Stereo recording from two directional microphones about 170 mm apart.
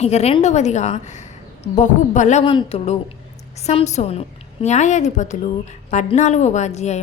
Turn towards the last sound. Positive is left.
turn(degrees=40)  # may be behind; listen again after turning